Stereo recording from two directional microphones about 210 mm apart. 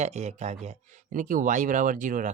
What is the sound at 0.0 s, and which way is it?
Speech, 35° right (ahead or behind).